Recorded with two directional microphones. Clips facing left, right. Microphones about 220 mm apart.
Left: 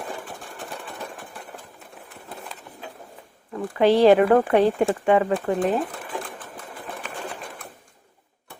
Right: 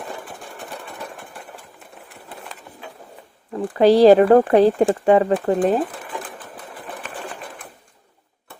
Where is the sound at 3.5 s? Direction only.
30° right (ahead or behind).